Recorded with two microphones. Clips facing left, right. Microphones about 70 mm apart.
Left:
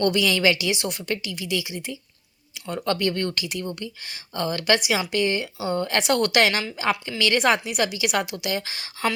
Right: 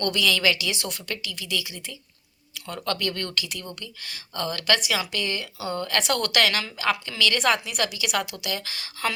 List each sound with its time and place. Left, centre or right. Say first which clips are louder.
0.0 s speech: left 3 dB; centre